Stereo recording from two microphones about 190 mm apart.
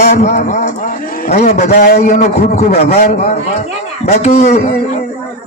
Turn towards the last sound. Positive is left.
turn(degrees=35)  # may be behind; listen again after turning